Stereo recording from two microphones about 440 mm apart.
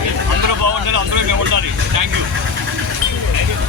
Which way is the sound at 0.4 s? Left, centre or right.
Right.